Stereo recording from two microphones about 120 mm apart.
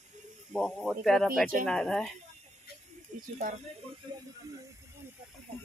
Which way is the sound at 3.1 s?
90° right.